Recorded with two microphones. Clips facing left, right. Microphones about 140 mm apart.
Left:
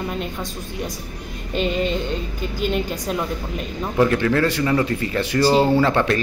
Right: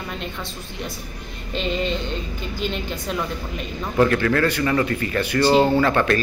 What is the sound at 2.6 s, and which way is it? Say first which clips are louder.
Speech: left 5 dB; 45° left (ahead or behind).